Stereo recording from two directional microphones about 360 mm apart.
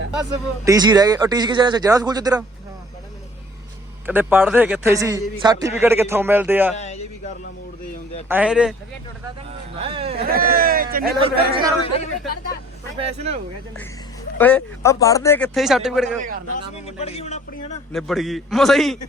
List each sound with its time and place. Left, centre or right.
0.1 s speech: centre
4.0 s a man's voice: centre
6.7 s a sound: centre
8.3 s a man's voice: centre
9.8 s speech: centre
13.0 s speech: centre
14.3 s a man's voice: centre
16.8 s a man's voice: centre
17.9 s a man's voice: centre